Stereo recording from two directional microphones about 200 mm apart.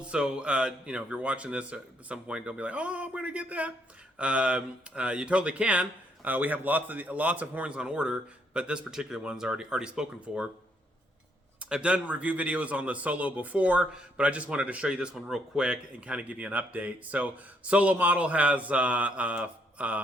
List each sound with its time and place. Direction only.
0.0 s speech: 5° right (ahead or behind)
11.6 s a man's voice: 5° right (ahead or behind)